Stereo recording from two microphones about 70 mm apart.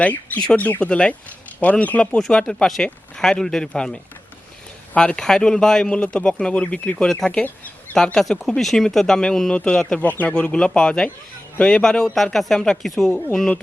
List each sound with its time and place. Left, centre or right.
0.0 s speech: left
4.9 s speech: centre